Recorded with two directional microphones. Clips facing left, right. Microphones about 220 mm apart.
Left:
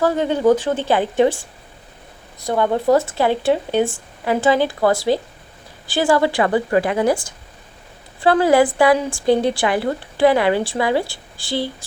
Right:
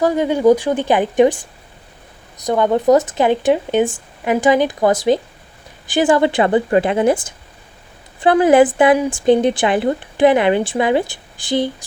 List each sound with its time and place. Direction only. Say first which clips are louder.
0.0 s a woman's voice: right 3 dB; 15° right (ahead or behind)